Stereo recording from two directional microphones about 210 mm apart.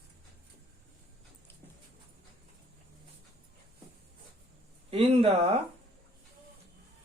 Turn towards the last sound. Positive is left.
turn(degrees=-30)  # may be behind; listen again after turning